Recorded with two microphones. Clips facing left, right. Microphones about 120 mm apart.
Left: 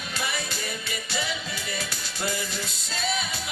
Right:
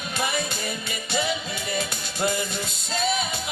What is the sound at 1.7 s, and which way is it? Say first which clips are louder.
Music: right 5 dB; 25° right (ahead or behind).